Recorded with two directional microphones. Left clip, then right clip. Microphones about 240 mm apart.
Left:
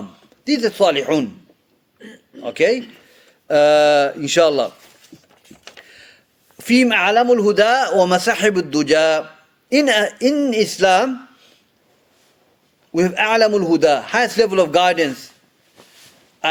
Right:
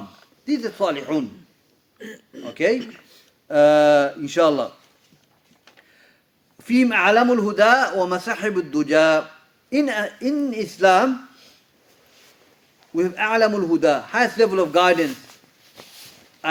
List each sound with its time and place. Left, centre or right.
0.4 s a man's voice: left
2.0 s a sound: right
2.5 s a man's voice: left
5.6 s a sound: left
6.6 s a man's voice: left
13.0 s a man's voice: left